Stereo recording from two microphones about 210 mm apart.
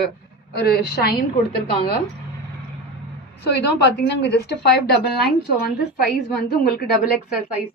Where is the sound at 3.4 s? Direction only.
50° left (ahead or behind).